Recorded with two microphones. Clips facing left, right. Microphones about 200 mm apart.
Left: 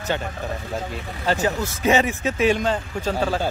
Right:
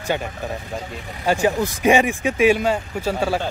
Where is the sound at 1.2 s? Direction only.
15° right (ahead or behind).